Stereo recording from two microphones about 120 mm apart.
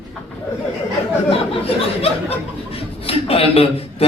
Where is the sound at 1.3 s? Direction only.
55° left (ahead or behind).